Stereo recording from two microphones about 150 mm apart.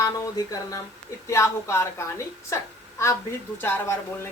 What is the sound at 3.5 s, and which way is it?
Speech, 15° left (ahead or behind).